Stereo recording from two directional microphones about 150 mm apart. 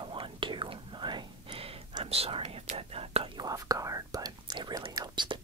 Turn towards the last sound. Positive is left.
turn(degrees=-30)  # may be behind; listen again after turning